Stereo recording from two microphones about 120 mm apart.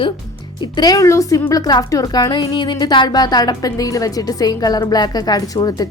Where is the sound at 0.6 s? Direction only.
35° left (ahead or behind).